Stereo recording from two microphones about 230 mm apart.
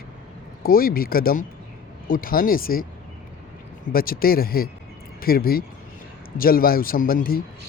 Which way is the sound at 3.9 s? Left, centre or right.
Left.